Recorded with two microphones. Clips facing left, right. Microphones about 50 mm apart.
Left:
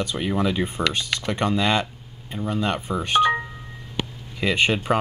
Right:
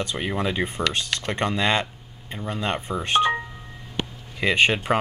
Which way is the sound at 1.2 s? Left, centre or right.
Right.